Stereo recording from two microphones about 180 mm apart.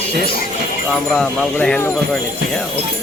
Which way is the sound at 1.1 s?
5° left (ahead or behind).